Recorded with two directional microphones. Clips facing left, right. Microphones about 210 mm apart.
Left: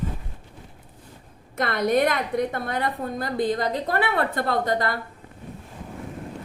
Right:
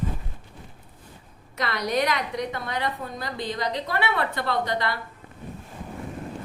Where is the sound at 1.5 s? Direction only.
50° left (ahead or behind).